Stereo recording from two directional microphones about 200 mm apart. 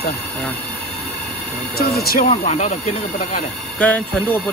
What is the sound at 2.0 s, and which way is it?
Speech, 50° left (ahead or behind).